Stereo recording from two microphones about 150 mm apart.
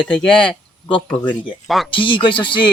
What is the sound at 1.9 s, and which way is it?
Speech, 35° left (ahead or behind).